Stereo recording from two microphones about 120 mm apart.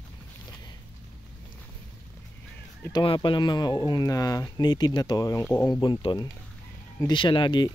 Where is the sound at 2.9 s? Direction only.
45° left (ahead or behind).